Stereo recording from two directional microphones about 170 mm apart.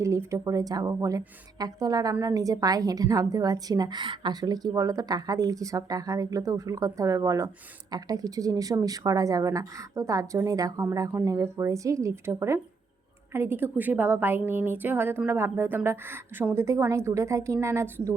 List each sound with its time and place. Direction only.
0.0 s a woman's voice: 15° right (ahead or behind)